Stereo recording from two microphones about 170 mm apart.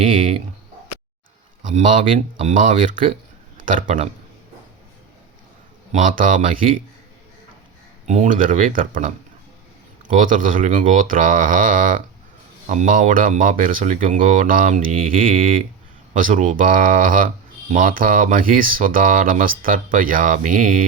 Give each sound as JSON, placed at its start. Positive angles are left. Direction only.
{"t": 1.7, "sound": "speech", "side_deg": -45}
{"t": 5.9, "sound": "speech", "side_deg": -50}
{"t": 8.0, "sound": "speech", "side_deg": -45}
{"t": 10.2, "sound": "speech", "side_deg": -50}